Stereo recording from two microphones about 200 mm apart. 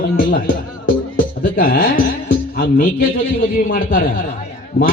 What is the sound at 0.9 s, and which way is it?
Music, 45° left (ahead or behind).